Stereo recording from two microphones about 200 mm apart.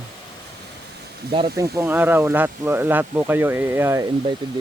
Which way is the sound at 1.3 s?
20° right (ahead or behind).